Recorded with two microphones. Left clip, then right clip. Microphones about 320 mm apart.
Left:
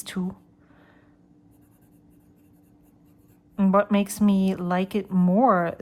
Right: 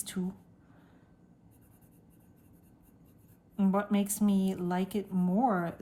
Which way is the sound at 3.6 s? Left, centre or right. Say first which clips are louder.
Left 10 dB; left.